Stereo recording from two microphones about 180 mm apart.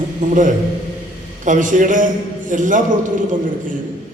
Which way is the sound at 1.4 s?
45° right (ahead or behind).